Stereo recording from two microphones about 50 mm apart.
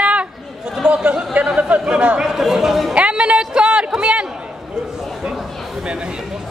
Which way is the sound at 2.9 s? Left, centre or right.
Right.